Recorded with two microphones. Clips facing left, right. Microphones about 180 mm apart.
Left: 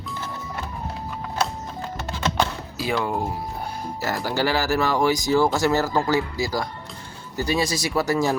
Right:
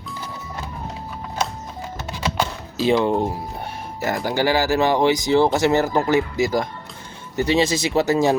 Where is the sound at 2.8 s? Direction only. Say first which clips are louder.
Right 7 dB; 25° right (ahead or behind).